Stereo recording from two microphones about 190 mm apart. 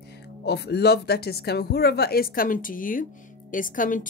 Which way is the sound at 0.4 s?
60° left (ahead or behind).